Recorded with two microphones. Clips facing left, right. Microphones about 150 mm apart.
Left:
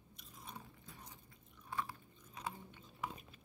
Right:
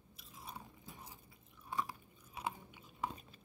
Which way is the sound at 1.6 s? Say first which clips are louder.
Right 2 dB; 15° right (ahead or behind).